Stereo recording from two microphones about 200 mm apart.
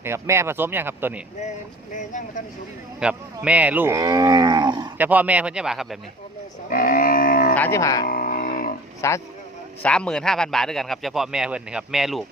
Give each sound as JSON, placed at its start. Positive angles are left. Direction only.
{"t": 0.0, "sound": "speech", "side_deg": -15}
{"t": 1.9, "sound": "speech", "side_deg": 40}
{"t": 3.0, "sound": "speech", "side_deg": -5}
{"t": 4.9, "sound": "speech", "side_deg": -10}
{"t": 6.7, "sound": "livestock", "side_deg": 45}
{"t": 7.5, "sound": "speech", "side_deg": 10}
{"t": 8.0, "sound": "music", "side_deg": 45}
{"t": 9.0, "sound": "speech", "side_deg": 15}